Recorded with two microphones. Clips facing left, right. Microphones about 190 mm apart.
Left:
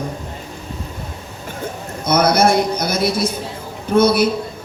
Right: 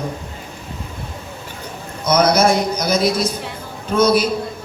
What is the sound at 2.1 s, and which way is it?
A man's voice, 55° left (ahead or behind).